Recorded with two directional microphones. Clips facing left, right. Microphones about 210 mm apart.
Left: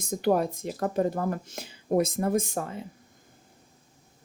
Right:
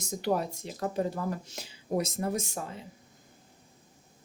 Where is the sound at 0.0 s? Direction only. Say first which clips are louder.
Left 5 dB; 55° left (ahead or behind).